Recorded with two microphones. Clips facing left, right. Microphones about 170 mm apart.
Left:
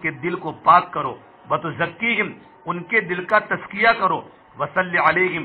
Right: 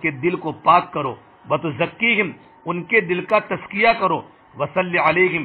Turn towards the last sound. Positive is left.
turn(degrees=-15)  # may be behind; listen again after turning